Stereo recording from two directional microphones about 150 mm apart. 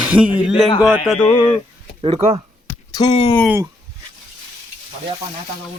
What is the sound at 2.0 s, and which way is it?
Speech, 40° right (ahead or behind).